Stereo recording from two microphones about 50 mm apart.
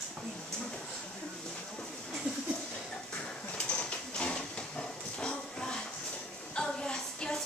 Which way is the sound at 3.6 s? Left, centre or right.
Left.